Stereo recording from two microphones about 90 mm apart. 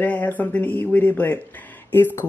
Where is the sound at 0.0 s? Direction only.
20° left (ahead or behind).